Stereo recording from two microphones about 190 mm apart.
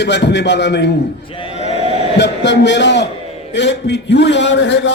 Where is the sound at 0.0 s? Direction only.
65° left (ahead or behind).